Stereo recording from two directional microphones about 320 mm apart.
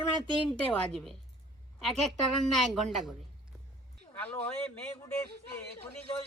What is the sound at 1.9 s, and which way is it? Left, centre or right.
Speech, centre.